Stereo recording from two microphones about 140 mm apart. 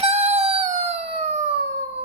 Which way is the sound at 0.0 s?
50° right (ahead or behind).